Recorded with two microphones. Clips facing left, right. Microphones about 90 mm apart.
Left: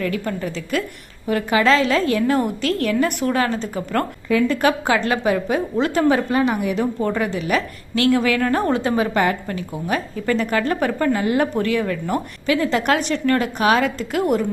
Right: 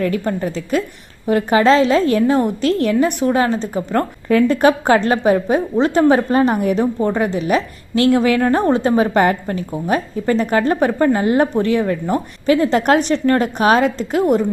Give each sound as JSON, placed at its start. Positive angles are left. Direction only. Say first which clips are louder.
{"t": 0.0, "sound": "a woman's voice", "louder": "right 5 dB", "side_deg": -35}
{"t": 4.3, "sound": "a woman's voice", "louder": "right 5 dB", "side_deg": -45}
{"t": 4.6, "sound": "a woman's voice", "louder": "right 5 dB", "side_deg": -35}
{"t": 7.0, "sound": "a woman's voice", "louder": "right 4 dB", "side_deg": -30}